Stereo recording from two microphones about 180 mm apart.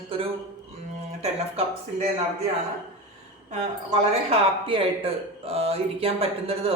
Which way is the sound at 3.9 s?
30° right (ahead or behind).